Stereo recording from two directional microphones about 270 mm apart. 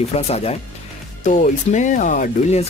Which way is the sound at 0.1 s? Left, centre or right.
Left.